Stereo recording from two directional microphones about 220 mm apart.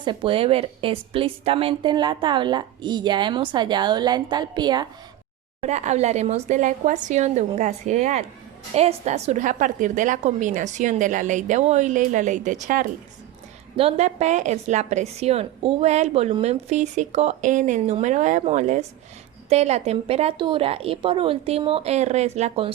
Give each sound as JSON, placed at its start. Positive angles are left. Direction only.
{"t": 0.0, "sound": "a woman's voice", "side_deg": -25}
{"t": 5.5, "sound": "a woman's voice", "side_deg": -30}